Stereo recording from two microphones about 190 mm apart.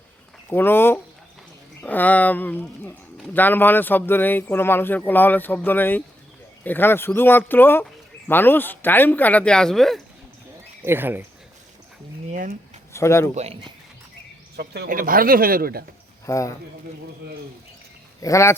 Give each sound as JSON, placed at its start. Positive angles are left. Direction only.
{"t": 0.5, "sound": "speech", "side_deg": 10}
{"t": 10.8, "sound": "speech", "side_deg": -10}
{"t": 12.3, "sound": "speech", "side_deg": -45}
{"t": 12.9, "sound": "speech", "side_deg": 15}
{"t": 13.3, "sound": "speech", "side_deg": -30}
{"t": 14.5, "sound": "speech", "side_deg": -60}
{"t": 16.2, "sound": "speech", "side_deg": 15}
{"t": 18.2, "sound": "speech", "side_deg": 15}